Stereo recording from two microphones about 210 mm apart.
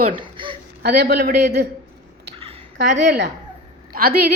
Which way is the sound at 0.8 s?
50° right (ahead or behind).